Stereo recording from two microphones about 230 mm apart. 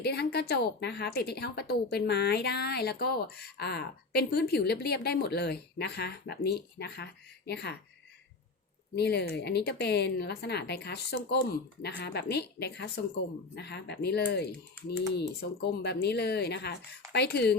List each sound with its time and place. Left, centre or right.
0.0 s a woman's voice: left
9.0 s a woman's voice: left